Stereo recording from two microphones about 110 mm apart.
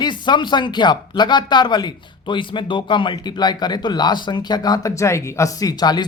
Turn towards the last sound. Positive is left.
turn(degrees=40)  # may be behind; listen again after turning